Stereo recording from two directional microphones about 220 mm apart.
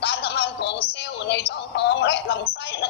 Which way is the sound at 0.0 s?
50° left (ahead or behind).